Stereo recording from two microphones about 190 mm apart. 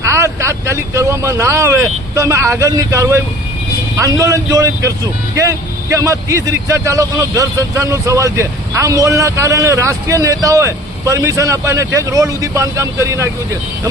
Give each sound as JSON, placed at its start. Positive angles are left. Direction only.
{"t": 0.0, "sound": "a man's voice", "side_deg": -15}